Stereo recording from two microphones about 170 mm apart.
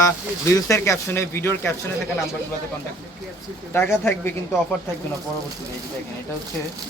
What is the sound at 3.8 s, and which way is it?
Speech, 15° left (ahead or behind).